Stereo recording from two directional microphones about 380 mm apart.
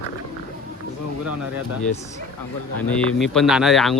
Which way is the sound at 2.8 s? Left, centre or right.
Centre.